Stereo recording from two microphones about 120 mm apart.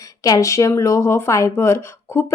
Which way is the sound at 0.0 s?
30° left (ahead or behind).